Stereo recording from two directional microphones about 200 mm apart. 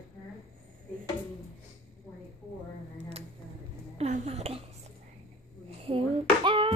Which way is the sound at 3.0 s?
30° right (ahead or behind).